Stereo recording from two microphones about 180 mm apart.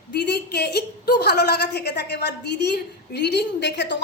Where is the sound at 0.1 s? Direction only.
65° left (ahead or behind).